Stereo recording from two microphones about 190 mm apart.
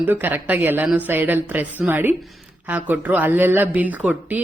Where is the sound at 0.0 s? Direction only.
10° right (ahead or behind).